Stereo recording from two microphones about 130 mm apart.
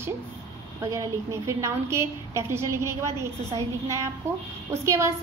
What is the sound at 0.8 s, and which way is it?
A woman's voice, 25° right (ahead or behind).